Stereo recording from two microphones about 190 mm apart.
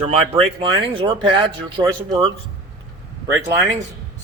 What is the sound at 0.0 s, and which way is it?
Speech, 30° right (ahead or behind).